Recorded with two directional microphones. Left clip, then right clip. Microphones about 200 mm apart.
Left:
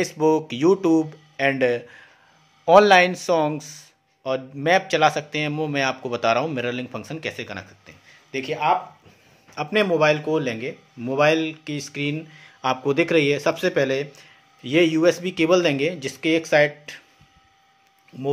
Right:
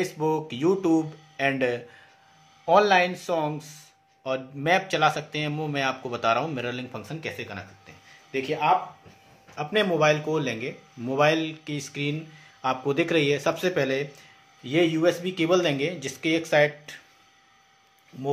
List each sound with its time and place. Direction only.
0.0 s speech: 40° left (ahead or behind)
9.6 s speech: 35° left (ahead or behind)